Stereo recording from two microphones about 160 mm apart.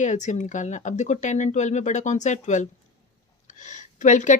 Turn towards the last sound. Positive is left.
turn(degrees=50)  # may be behind; listen again after turning